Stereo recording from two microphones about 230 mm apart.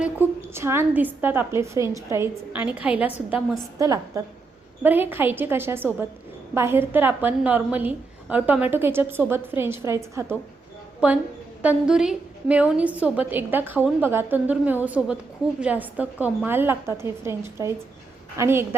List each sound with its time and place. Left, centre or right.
0.0 s a woman's voice: centre
11.6 s a woman's voice: centre